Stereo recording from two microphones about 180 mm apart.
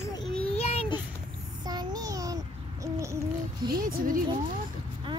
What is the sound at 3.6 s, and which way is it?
Speech, 55° right (ahead or behind).